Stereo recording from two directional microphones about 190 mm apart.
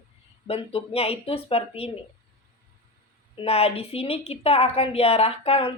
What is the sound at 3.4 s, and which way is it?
A woman's voice, 30° left (ahead or behind).